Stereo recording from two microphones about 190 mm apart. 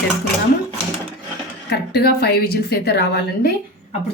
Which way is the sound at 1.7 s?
60° left (ahead or behind).